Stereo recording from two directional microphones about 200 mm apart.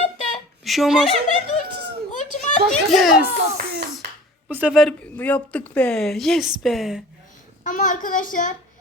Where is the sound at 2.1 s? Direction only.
40° left (ahead or behind).